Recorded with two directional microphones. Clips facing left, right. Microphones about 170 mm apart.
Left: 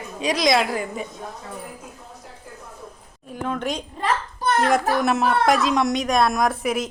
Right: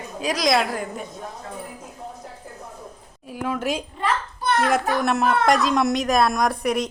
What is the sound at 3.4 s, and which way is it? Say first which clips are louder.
Speech: right 1 dB; 5° right (ahead or behind).